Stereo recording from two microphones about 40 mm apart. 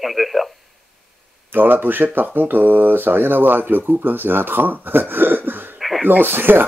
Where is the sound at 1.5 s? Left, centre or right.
Right.